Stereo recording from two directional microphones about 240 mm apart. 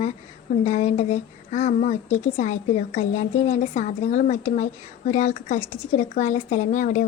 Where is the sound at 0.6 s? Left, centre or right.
Left.